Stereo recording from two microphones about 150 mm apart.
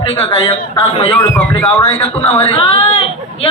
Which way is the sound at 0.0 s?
40° left (ahead or behind).